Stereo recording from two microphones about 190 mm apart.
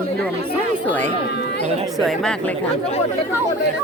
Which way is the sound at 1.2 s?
60° left (ahead or behind).